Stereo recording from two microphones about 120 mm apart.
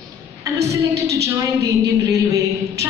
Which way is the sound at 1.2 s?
25° right (ahead or behind).